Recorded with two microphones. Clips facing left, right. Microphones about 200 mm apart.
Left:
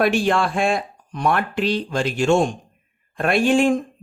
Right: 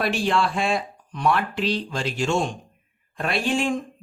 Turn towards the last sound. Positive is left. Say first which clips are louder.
# left 7 dB
turn(degrees=50)  # may be behind; listen again after turning